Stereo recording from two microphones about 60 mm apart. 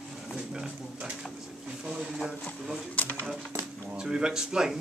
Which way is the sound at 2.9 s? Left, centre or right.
Left.